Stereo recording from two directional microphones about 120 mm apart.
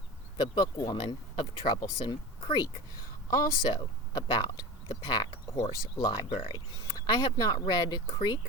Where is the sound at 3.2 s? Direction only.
35° left (ahead or behind).